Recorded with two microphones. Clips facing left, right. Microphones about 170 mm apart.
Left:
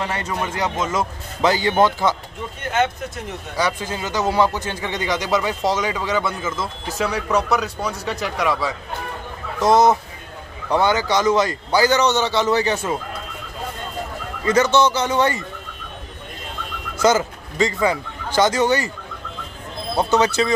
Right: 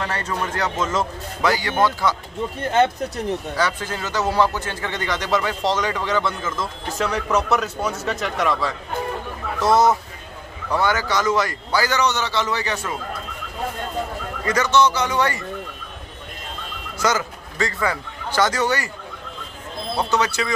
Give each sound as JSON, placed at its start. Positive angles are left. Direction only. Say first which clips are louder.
{"t": 0.0, "sound": "speech", "louder": "left 1 dB", "side_deg": 15}
{"t": 1.4, "sound": "a man's voice", "louder": "left 3 dB", "side_deg": 25}
{"t": 3.5, "sound": "speech", "louder": "left 1 dB", "side_deg": 15}
{"t": 9.6, "sound": "a man's voice", "louder": "left 2 dB", "side_deg": 20}
{"t": 14.4, "sound": "a man's voice", "louder": "left 2 dB", "side_deg": 25}
{"t": 17.0, "sound": "a man's voice", "louder": "left 5 dB", "side_deg": 25}
{"t": 20.0, "sound": "a man's voice", "louder": "left 4 dB", "side_deg": 25}